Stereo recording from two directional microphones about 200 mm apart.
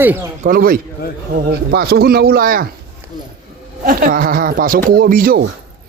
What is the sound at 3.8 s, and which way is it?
Speech, 45° right (ahead or behind).